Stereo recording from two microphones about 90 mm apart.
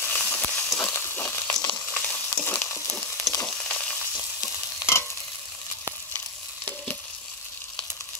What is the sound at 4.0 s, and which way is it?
Frying, 30° left (ahead or behind).